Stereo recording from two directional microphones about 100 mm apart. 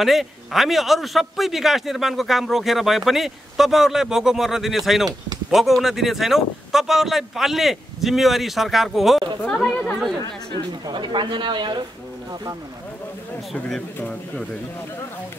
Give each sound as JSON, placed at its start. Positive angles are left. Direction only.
{"t": 0.0, "sound": "a man's voice", "side_deg": 0}
{"t": 10.9, "sound": "speech", "side_deg": -50}
{"t": 13.5, "sound": "a man's voice", "side_deg": 5}